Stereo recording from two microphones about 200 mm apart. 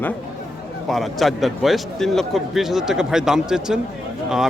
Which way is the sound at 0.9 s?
Centre (ahead or behind).